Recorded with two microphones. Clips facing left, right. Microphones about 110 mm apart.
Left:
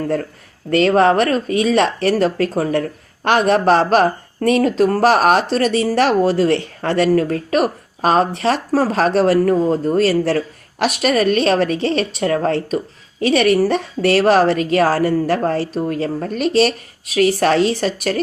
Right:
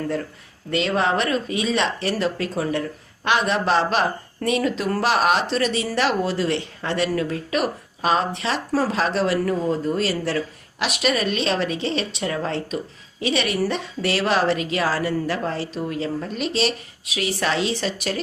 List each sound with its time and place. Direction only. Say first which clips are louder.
0.7 s speech: left 8 dB; 50° left (ahead or behind)